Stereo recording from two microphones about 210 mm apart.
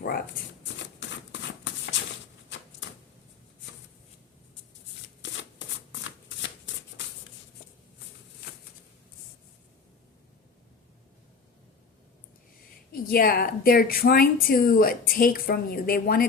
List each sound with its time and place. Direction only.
0.8 s a sound: 60° left (ahead or behind)
2.8 s typewriter: 60° left (ahead or behind)
5.2 s shuffling cards: 60° left (ahead or behind)
12.9 s a woman's voice: 45° left (ahead or behind)